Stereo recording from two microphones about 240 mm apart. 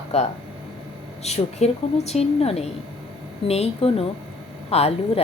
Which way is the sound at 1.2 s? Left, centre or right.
Left.